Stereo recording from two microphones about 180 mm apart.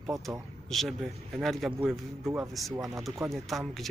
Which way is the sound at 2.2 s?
15° right (ahead or behind).